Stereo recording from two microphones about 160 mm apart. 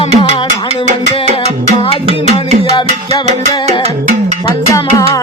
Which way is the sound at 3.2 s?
45° right (ahead or behind).